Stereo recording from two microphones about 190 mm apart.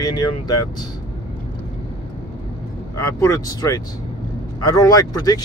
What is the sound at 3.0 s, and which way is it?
Speech, 15° left (ahead or behind).